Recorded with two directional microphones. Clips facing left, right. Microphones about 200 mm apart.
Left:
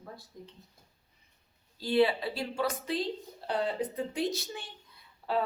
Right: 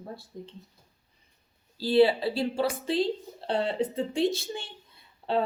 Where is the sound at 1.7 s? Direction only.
30° right (ahead or behind).